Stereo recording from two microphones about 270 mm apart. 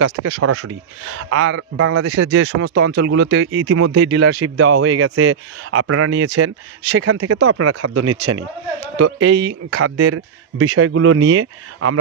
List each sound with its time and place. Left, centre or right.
0.4 s speech: right
1.3 s a man's voice: right
9.3 s speech: right
9.7 s a man's voice: right